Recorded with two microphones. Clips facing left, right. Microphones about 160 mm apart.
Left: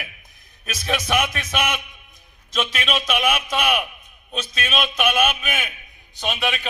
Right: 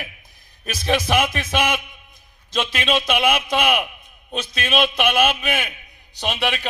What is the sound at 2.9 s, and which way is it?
Speech, 30° right (ahead or behind).